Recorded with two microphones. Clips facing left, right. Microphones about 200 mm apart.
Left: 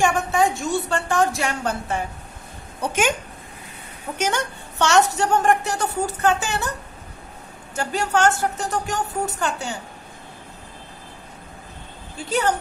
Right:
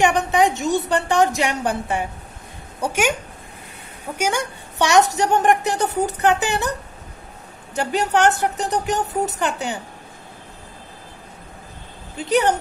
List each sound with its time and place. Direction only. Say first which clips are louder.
0.0 s a woman's voice: right 2 dB; 20° right (ahead or behind)
4.2 s a woman's voice: right 1 dB; 10° right (ahead or behind)
7.7 s a woman's voice: right 3 dB; 20° right (ahead or behind)
12.2 s a woman's voice: right 4 dB; 20° right (ahead or behind)